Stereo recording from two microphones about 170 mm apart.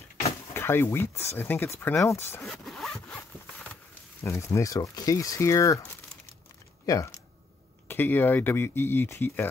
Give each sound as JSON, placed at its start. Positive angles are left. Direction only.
{"t": 0.6, "sound": "speech", "side_deg": 15}
{"t": 2.4, "sound": "zipper", "side_deg": 0}
{"t": 4.2, "sound": "speech", "side_deg": 15}
{"t": 7.9, "sound": "speech", "side_deg": 10}